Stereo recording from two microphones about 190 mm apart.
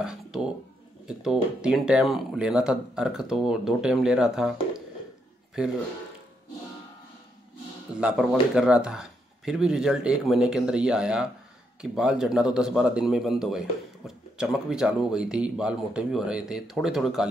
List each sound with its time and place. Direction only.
0.0 s a man's voice: 5° right (ahead or behind)
7.9 s a man's voice: 5° right (ahead or behind)